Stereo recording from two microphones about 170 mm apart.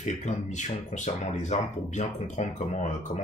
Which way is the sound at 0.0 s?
45° left (ahead or behind).